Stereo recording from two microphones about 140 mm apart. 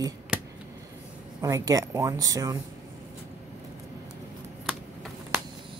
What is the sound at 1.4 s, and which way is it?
Speech, 25° right (ahead or behind).